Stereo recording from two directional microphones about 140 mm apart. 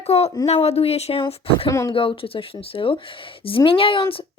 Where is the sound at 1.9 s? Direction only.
40° left (ahead or behind).